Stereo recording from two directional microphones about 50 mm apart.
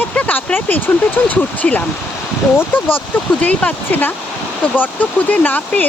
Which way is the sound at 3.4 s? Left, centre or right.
Left.